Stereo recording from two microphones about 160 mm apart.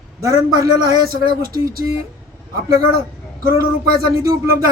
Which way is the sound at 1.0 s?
65° right (ahead or behind).